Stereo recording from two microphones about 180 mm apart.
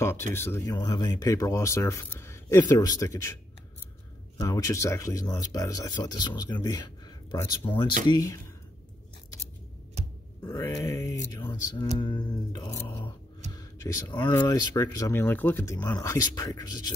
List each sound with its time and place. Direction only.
0.3 s speech: 15° left (ahead or behind)
4.4 s speech: 20° left (ahead or behind)
10.4 s speech: 20° left (ahead or behind)